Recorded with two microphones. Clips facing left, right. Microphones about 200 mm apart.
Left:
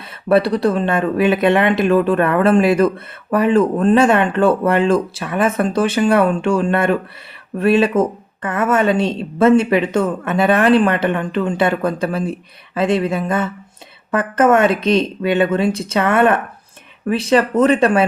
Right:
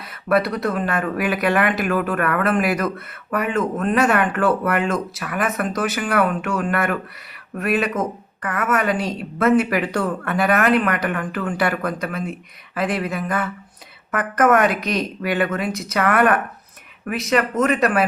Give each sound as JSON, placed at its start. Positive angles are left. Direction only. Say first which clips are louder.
{"t": 0.0, "sound": "speech", "louder": "left 5 dB", "side_deg": 30}